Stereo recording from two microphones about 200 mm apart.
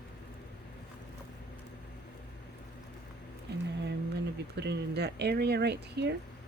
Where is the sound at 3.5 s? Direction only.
55° right (ahead or behind).